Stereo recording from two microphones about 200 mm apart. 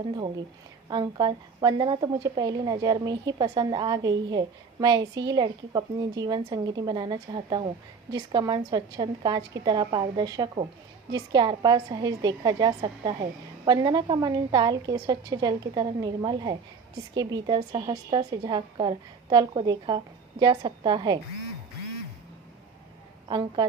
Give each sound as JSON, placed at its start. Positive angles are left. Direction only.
{"t": 0.9, "sound": "a woman's voice", "side_deg": -20}